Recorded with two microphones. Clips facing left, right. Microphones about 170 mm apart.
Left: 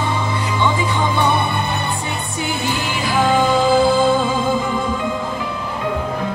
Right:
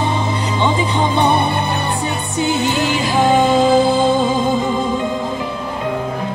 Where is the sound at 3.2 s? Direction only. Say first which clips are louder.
Right 3 dB; 20° right (ahead or behind).